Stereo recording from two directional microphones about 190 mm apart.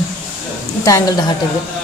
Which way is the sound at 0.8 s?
15° left (ahead or behind).